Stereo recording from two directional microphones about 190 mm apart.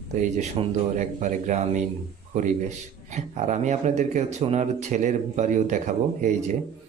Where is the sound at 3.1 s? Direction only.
40° right (ahead or behind).